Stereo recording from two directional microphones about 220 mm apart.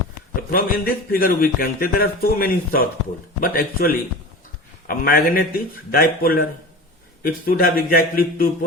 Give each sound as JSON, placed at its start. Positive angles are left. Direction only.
{"t": 0.5, "sound": "a man's voice", "side_deg": 40}